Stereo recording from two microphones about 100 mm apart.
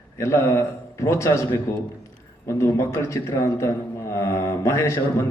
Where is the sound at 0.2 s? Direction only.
30° left (ahead or behind).